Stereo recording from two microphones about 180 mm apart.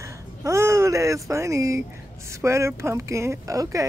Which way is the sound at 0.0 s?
15° right (ahead or behind).